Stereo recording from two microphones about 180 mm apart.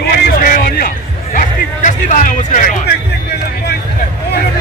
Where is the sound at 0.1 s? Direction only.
55° left (ahead or behind).